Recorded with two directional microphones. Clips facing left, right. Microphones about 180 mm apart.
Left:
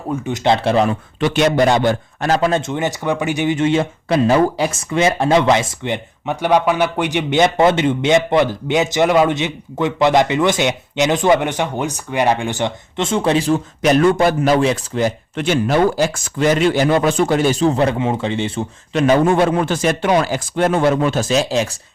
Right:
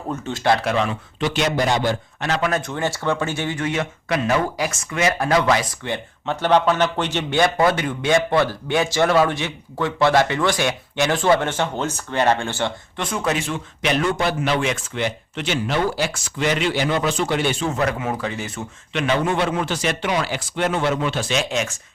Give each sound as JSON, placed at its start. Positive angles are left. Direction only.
{"t": 0.1, "sound": "speech", "side_deg": 15}
{"t": 1.2, "sound": "a man's voice", "side_deg": 60}
{"t": 2.3, "sound": "speech", "side_deg": 30}